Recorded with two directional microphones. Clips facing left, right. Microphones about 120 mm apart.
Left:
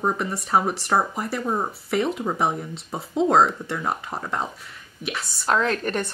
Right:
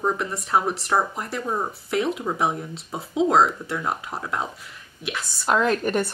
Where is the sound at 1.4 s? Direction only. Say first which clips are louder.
Left 1 dB; 15° left (ahead or behind).